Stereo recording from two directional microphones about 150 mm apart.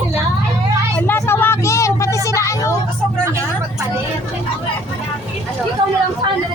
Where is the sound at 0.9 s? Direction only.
15° left (ahead or behind).